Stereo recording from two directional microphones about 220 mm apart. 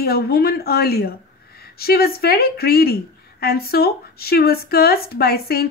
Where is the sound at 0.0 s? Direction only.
45° left (ahead or behind).